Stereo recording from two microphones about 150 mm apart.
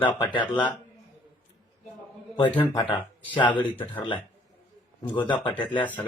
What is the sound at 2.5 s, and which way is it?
Speech, 30° left (ahead or behind).